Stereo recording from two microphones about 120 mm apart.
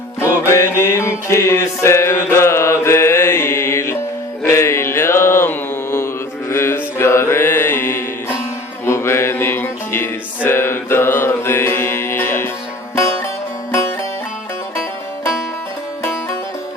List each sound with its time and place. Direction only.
0.3 s music: 20° left (ahead or behind)
4.4 s mantra: 25° left (ahead or behind)
8.8 s music: 20° left (ahead or behind)